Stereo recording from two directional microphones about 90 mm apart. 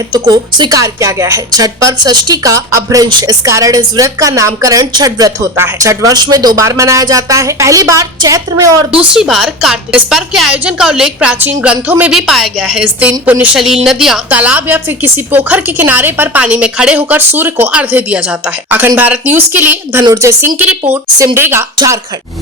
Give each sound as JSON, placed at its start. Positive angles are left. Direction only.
{"t": 0.1, "sound": "a woman's voice", "side_deg": -55}
{"t": 0.8, "sound": "speech", "side_deg": -35}
{"t": 3.1, "sound": "speech", "side_deg": -55}
{"t": 3.4, "sound": "speech", "side_deg": -35}
{"t": 5.5, "sound": "speech", "side_deg": -30}
{"t": 6.6, "sound": "speech", "side_deg": -35}
{"t": 8.9, "sound": "a woman's voice", "side_deg": -10}
{"t": 12.1, "sound": "speech", "side_deg": -5}
{"t": 12.8, "sound": "a woman's voice", "side_deg": -15}
{"t": 13.6, "sound": "speech", "side_deg": -5}
{"t": 14.3, "sound": "a woman's voice", "side_deg": -15}
{"t": 17.0, "sound": "a woman's voice", "side_deg": -20}